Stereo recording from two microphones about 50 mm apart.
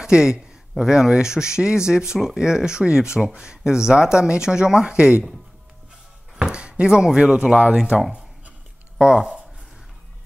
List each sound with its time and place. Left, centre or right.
0.0 s speech: centre
6.3 s speech: centre
9.0 s speech: centre